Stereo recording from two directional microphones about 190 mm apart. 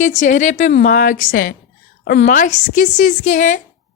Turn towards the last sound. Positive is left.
turn(degrees=40)  # may be behind; listen again after turning